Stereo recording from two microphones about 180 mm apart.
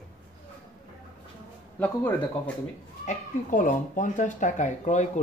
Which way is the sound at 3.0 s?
45° left (ahead or behind).